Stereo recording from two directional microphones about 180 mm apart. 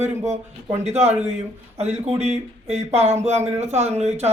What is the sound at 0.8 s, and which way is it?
A man's voice, 35° right (ahead or behind).